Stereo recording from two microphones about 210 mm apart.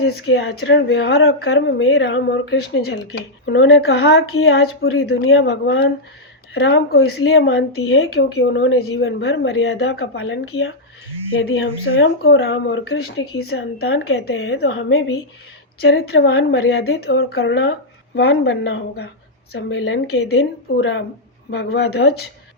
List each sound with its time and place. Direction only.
0.2 s speech: 50° left (ahead or behind)
6.5 s speech: 50° left (ahead or behind)
11.3 s speech: 70° left (ahead or behind); by 14.8 s 50° left (ahead or behind)
14.8 s speech: 65° left (ahead or behind)
15.8 s speech: 50° left (ahead or behind)